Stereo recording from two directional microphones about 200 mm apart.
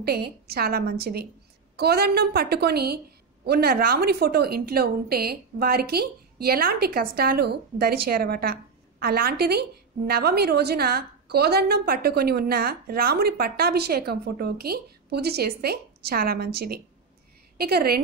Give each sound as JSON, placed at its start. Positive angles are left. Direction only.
{"t": 0.5, "sound": "a woman's voice", "side_deg": -50}